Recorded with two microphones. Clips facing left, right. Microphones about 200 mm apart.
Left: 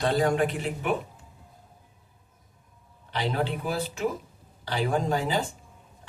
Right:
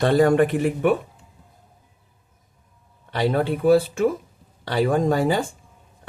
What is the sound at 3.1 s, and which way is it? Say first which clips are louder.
Speech: right 7 dB; 55° right (ahead or behind).